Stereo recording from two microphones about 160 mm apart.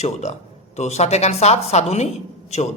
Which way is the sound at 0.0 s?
45° left (ahead or behind).